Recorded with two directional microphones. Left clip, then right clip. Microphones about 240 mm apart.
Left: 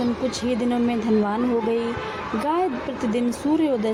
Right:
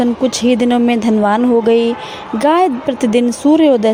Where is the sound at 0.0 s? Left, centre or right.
Right.